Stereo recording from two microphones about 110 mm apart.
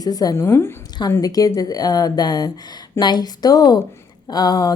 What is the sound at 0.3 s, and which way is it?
Speech, 25° left (ahead or behind).